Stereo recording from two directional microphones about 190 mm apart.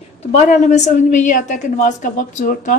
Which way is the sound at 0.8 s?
40° left (ahead or behind).